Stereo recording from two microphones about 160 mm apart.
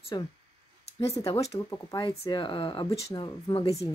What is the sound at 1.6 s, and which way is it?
A woman's voice, 20° left (ahead or behind).